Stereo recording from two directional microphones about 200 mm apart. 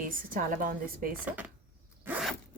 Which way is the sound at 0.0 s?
45° right (ahead or behind).